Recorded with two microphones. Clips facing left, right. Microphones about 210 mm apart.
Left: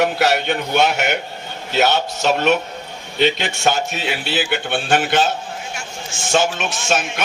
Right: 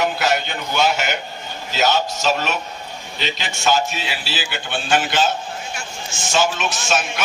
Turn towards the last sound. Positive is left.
turn(degrees=55)  # may be behind; listen again after turning